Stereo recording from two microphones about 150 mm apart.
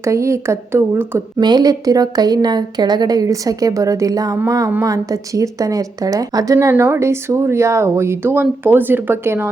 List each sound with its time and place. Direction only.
0.0 s a woman's voice: 20° right (ahead or behind)
1.4 s a woman's voice: 30° right (ahead or behind)